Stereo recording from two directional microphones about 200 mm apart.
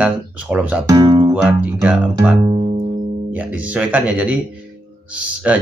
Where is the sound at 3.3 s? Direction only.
5° right (ahead or behind).